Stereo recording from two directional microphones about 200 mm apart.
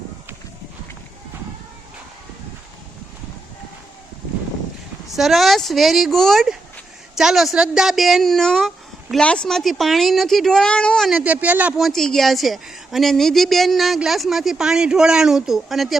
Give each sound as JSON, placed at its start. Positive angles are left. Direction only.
{"t": 5.1, "sound": "speech", "side_deg": 0}